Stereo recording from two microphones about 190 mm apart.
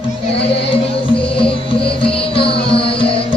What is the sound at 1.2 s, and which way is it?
Music, 30° left (ahead or behind).